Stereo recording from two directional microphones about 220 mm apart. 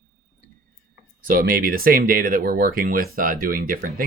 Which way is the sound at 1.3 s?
40° right (ahead or behind).